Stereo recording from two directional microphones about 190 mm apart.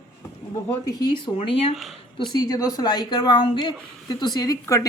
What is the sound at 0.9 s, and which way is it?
Speech, 20° left (ahead or behind).